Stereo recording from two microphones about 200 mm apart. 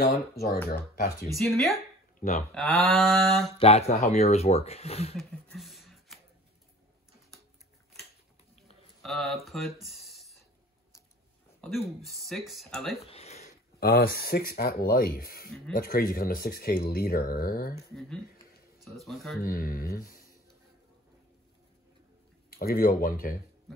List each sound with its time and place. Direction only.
0.0 s speech: 50° left (ahead or behind)
1.3 s speech: centre (ahead or behind)
2.1 s speech: 40° left (ahead or behind)
2.5 s speech: 5° left (ahead or behind)
3.5 s speech: 30° left (ahead or behind)
5.1 s a sound: centre (ahead or behind)
9.0 s speech: centre (ahead or behind)
11.6 s speech: centre (ahead or behind)
13.0 s a sound: 30° left (ahead or behind)
13.7 s speech: 50° left (ahead or behind)
18.8 s speech: centre (ahead or behind)
19.4 s speech: 45° left (ahead or behind)
22.5 s speech: 50° left (ahead or behind)